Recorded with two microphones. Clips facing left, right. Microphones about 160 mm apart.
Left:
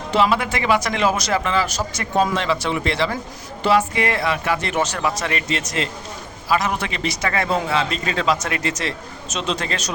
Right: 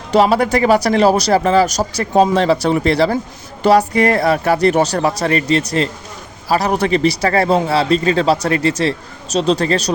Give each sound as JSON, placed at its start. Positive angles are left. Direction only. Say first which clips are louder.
{"t": 0.1, "sound": "speech", "louder": "right 7 dB", "side_deg": -40}